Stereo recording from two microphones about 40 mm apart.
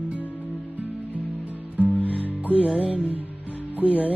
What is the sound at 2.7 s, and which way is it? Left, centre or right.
Music, right.